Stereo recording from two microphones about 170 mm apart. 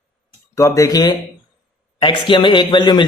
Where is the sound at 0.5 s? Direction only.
20° left (ahead or behind).